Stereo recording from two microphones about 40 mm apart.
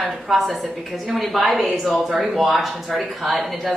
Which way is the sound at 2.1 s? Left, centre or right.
Centre.